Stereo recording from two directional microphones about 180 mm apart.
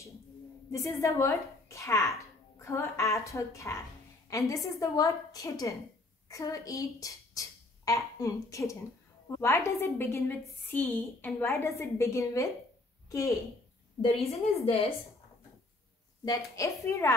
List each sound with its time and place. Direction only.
0.7 s a woman's voice: 15° left (ahead or behind)
14.1 s a woman's voice: 30° left (ahead or behind)
16.3 s a woman's voice: 15° left (ahead or behind)